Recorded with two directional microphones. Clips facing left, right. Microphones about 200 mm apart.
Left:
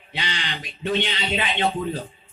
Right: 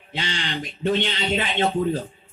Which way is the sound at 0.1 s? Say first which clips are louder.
Right 2 dB; 45° right (ahead or behind).